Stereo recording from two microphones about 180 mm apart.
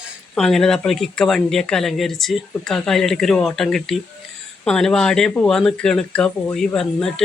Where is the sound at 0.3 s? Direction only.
5° left (ahead or behind).